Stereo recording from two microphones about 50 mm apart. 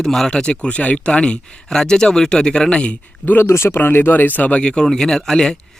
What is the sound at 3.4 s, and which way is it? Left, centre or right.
Speech, left.